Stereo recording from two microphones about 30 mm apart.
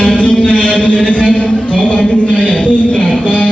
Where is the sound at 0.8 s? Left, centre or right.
Left.